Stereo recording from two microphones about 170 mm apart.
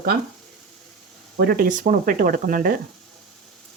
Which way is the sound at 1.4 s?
60° right (ahead or behind).